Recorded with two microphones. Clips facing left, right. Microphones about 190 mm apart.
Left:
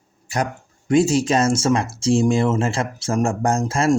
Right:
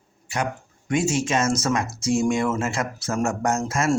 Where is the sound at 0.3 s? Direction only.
40° left (ahead or behind).